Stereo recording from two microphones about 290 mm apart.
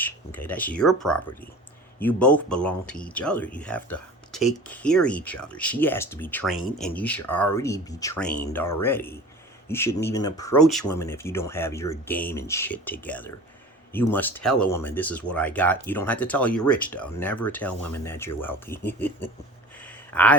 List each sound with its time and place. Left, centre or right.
0.0 s speech: centre